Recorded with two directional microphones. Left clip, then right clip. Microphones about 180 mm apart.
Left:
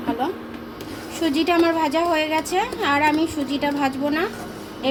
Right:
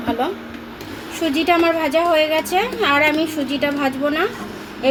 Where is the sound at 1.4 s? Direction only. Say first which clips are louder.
Right 3 dB; 45° right (ahead or behind).